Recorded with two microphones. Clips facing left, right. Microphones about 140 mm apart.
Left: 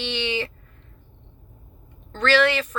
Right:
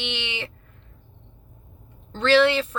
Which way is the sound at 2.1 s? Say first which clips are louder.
Right 2 dB; 25° right (ahead or behind).